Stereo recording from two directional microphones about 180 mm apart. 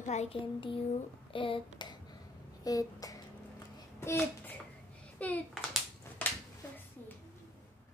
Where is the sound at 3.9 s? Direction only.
15° left (ahead or behind).